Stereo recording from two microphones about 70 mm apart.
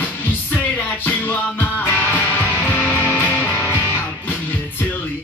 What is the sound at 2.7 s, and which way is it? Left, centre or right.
Music, left.